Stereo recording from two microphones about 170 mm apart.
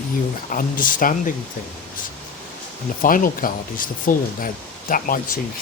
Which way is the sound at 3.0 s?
55° left (ahead or behind).